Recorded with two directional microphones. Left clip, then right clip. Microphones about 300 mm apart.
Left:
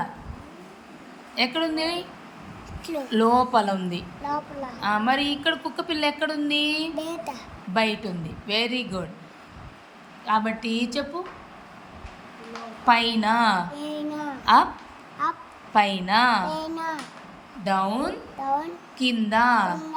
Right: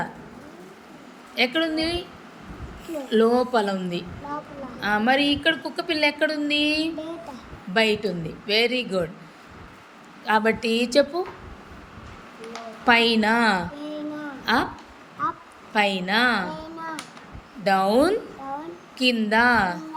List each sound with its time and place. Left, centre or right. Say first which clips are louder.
1.4 s a woman's voice: right 2 dB; centre
3.1 s a woman's voice: even; centre
7.0 s a sound: left 3 dB; left
7.7 s a woman's voice: right 3 dB; centre
10.2 s a woman's voice: right 3 dB; centre
12.8 s a woman's voice: right 2 dB; centre
13.7 s a sound: left 2 dB; left
14.4 s a woman's voice: left 6 dB; centre
15.7 s a woman's voice: left 1 dB; centre
16.5 s a sound: left 5 dB; left
17.6 s a woman's voice: right 5 dB; centre